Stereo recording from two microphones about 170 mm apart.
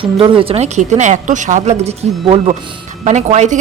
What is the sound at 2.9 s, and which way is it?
Speech, 45° right (ahead or behind).